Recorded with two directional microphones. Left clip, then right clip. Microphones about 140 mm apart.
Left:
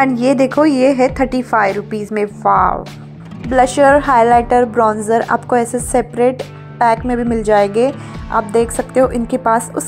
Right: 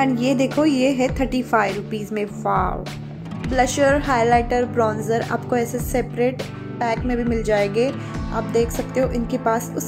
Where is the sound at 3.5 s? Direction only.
55° left (ahead or behind).